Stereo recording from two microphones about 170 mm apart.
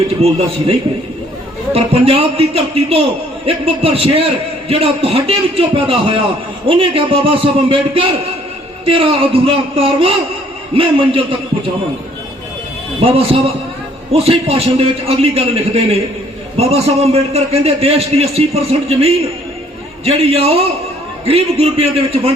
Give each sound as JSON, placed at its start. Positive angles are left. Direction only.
{"t": 0.2, "sound": "a man's voice", "side_deg": -35}
{"t": 1.7, "sound": "a man's voice", "side_deg": -35}
{"t": 13.0, "sound": "a man's voice", "side_deg": -35}